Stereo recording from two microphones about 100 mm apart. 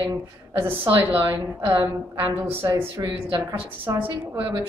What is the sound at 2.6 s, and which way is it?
Speech, 40° right (ahead or behind).